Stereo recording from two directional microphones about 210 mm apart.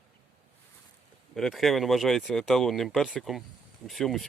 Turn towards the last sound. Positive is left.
turn(degrees=0)  # may be behind; listen again after turning